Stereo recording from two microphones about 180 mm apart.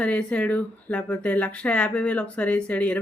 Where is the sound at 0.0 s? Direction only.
5° left (ahead or behind).